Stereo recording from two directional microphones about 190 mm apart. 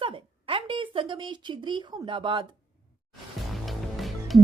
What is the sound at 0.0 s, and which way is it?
A woman's voice, 30° right (ahead or behind).